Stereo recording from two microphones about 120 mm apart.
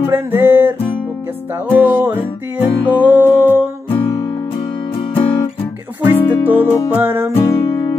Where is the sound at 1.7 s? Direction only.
15° right (ahead or behind).